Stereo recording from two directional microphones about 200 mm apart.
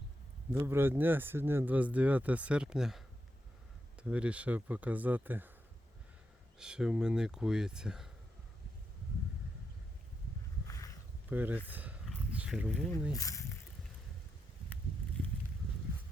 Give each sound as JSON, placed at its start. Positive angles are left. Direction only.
{"t": 0.6, "sound": "speech", "side_deg": -10}
{"t": 6.6, "sound": "speech", "side_deg": -5}
{"t": 10.7, "sound": "a sound", "side_deg": 15}
{"t": 11.3, "sound": "speech", "side_deg": -10}
{"t": 13.1, "sound": "speech", "side_deg": 15}